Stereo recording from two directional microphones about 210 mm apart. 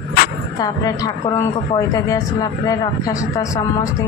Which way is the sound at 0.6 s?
15° left (ahead or behind).